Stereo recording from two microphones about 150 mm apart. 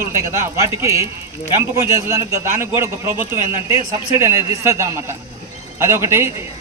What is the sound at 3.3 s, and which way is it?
Speech, 40° left (ahead or behind).